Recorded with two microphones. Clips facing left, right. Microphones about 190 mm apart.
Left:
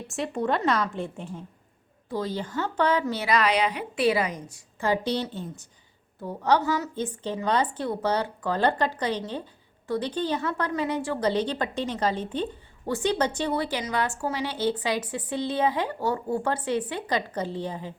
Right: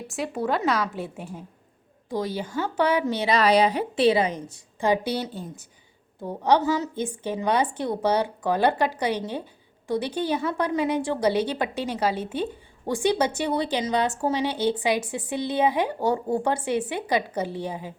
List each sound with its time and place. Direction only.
0.1 s a woman's voice: 5° right (ahead or behind)
3.3 s a woman's voice: 35° right (ahead or behind)
4.8 s a woman's voice: 10° right (ahead or behind)
6.2 s a woman's voice: 15° right (ahead or behind)